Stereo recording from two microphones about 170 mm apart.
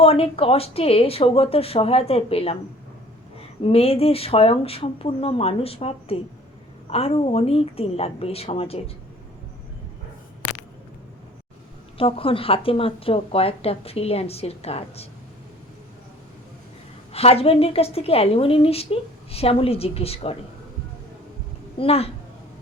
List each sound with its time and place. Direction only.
0.0 s a woman's voice: 35° left (ahead or behind)
3.6 s a woman's voice: 35° left (ahead or behind)
11.9 s a woman's voice: 35° left (ahead or behind)
17.1 s a woman's voice: 35° left (ahead or behind)
21.8 s a woman's voice: 35° left (ahead or behind)